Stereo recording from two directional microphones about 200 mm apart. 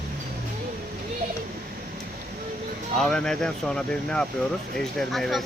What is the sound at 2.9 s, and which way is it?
Speech, 5° left (ahead or behind).